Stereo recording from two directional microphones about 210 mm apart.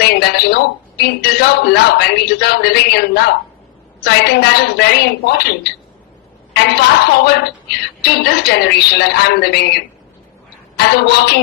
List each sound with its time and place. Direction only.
0.0 s speech: 50° left (ahead or behind)
6.5 s a woman's voice: 50° left (ahead or behind)